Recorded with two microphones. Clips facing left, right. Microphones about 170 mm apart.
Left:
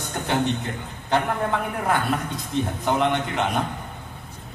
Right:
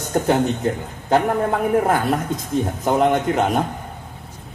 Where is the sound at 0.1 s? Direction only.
45° right (ahead or behind).